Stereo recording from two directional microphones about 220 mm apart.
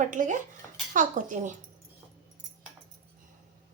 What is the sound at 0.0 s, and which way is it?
A woman's voice, 35° right (ahead or behind).